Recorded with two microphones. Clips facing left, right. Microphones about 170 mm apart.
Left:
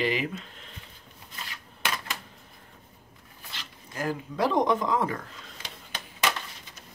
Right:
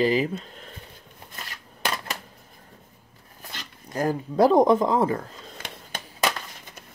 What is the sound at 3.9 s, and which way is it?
Speech, 40° right (ahead or behind).